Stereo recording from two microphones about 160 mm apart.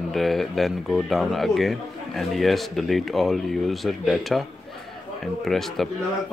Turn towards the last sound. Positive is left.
turn(degrees=0)  # may be behind; listen again after turning